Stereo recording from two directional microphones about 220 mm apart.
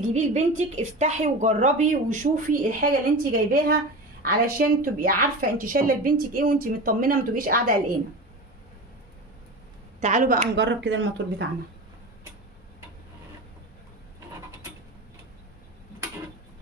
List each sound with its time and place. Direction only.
0.1 s speech: 30° right (ahead or behind)
9.9 s speech: 35° right (ahead or behind); by 11.4 s 55° right (ahead or behind)